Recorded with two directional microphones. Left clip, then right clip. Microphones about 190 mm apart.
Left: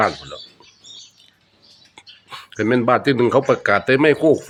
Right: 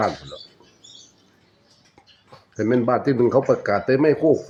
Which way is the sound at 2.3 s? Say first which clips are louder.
Left 2 dB; 20° left (ahead or behind).